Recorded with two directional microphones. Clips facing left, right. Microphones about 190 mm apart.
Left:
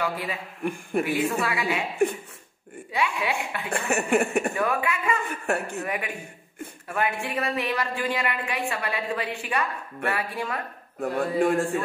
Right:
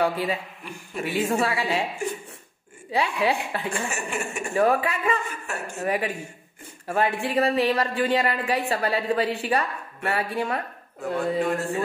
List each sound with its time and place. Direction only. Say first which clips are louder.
0.0 s a woman's voice: right 5 dB; 35° right (ahead or behind)
2.9 s a woman's voice: right 4 dB; 35° right (ahead or behind)
3.7 s speech: left 6 dB; 60° left (ahead or behind)
4.6 s a woman's voice: right 4 dB; 35° right (ahead or behind)
5.3 s speech: left 6 dB; 60° left (ahead or behind)
5.8 s a woman's voice: right 4 dB; 35° right (ahead or behind)
11.0 s speech: left 1 dB; 55° left (ahead or behind)